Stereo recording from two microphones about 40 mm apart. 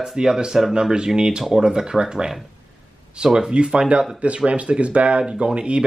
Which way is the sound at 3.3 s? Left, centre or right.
Centre.